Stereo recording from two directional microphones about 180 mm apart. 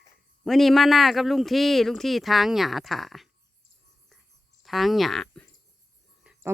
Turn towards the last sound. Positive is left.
turn(degrees=0)  # may be behind; listen again after turning